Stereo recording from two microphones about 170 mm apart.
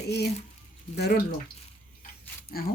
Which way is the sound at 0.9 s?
70° left (ahead or behind).